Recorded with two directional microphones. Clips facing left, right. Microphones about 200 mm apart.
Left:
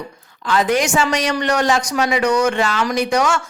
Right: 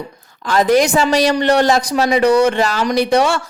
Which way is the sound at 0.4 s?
40° right (ahead or behind).